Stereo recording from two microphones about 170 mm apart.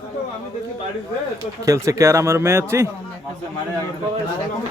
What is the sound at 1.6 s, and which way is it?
Speech, 20° right (ahead or behind).